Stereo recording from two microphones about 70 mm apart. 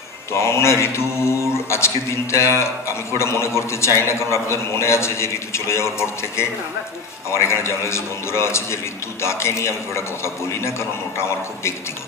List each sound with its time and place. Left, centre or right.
0.3 s a man's voice: left